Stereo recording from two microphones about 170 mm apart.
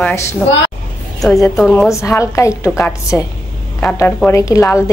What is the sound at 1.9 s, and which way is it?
Speech, 15° left (ahead or behind).